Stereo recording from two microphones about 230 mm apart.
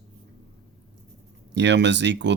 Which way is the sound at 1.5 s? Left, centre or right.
Right.